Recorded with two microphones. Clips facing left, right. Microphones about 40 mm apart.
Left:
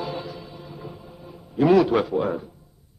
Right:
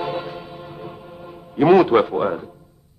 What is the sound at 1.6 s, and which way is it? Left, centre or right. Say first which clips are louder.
Music: right 4 dB; right.